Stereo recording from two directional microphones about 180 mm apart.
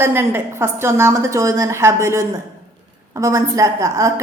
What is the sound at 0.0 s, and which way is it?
A woman's voice, 15° right (ahead or behind).